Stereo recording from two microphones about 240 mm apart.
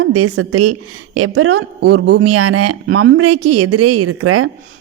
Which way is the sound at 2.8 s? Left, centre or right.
Right.